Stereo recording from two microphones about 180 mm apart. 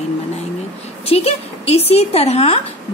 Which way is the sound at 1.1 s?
35° left (ahead or behind).